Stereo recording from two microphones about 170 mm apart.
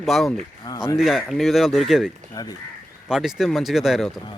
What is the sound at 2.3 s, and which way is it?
Speech, 20° left (ahead or behind).